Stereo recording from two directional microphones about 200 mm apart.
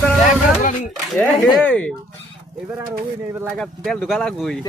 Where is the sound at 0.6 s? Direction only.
40° left (ahead or behind).